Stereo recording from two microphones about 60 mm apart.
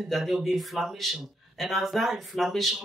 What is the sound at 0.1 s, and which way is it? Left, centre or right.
Speech, centre.